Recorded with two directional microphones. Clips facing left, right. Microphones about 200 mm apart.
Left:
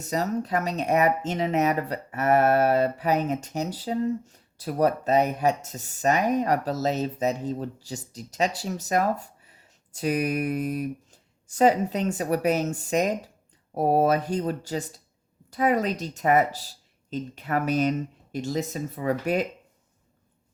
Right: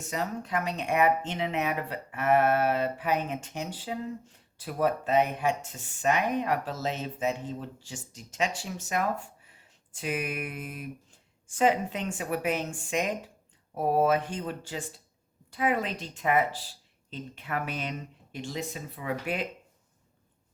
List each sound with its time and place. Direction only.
0.0 s speech: 40° left (ahead or behind)